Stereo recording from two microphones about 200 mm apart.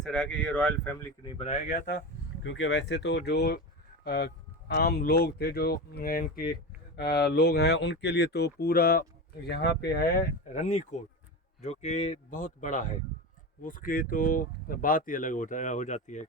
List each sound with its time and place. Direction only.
0.0 s speech: centre (ahead or behind)
1.2 s speech: 25° left (ahead or behind)
2.4 s speech: 75° left (ahead or behind); by 16.2 s 35° left (ahead or behind)